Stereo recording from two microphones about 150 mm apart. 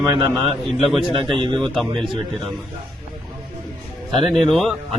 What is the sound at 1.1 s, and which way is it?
Speech, 35° right (ahead or behind).